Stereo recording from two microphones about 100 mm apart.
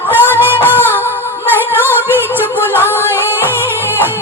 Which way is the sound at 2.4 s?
20° right (ahead or behind).